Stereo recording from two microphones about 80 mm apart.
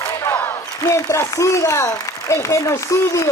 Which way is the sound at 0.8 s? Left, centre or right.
Left.